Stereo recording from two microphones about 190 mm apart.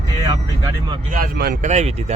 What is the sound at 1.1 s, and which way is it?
Speech, 50° right (ahead or behind).